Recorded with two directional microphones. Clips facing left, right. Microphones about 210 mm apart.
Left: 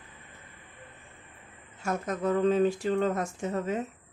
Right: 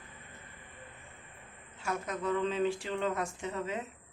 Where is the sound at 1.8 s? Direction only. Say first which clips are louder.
Left 5 dB; 45° left (ahead or behind).